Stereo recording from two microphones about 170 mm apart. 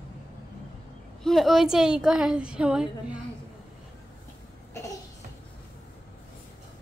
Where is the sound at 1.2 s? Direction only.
Centre (ahead or behind).